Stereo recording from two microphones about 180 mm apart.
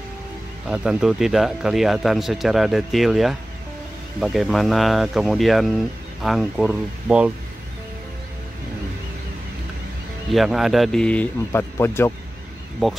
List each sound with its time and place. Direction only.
0.7 s speech: 5° right (ahead or behind)
10.3 s speech: centre (ahead or behind)